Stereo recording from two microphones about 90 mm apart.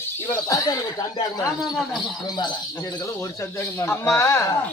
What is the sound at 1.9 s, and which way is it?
Speech, 55° left (ahead or behind).